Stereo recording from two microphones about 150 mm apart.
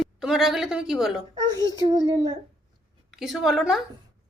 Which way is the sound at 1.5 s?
25° right (ahead or behind).